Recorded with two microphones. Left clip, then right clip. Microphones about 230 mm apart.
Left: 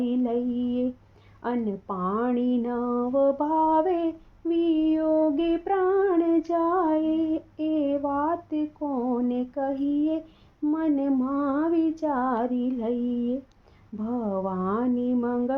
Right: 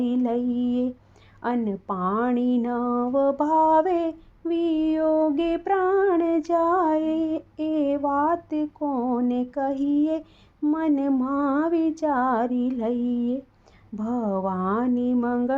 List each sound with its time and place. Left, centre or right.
0.0 s mantra: right
1.4 s speech: right